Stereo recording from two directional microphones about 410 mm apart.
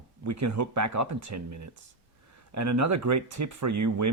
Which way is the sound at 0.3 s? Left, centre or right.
Right.